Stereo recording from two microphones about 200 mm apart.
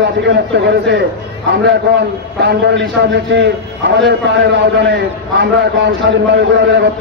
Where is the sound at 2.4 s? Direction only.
55° right (ahead or behind).